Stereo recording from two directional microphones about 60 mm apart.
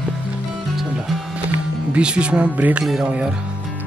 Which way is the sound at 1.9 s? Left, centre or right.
Centre.